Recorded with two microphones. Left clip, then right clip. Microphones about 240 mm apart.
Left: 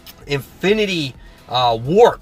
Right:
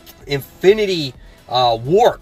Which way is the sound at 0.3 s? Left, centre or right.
Centre.